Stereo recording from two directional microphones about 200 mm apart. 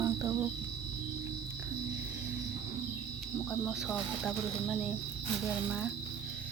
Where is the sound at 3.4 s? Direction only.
10° left (ahead or behind).